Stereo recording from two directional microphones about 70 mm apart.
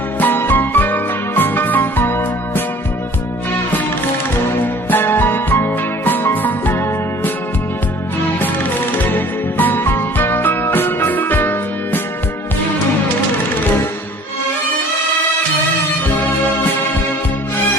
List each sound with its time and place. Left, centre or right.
0.2 s music: left
4.6 s music: left
9.1 s music: left
16.1 s music: left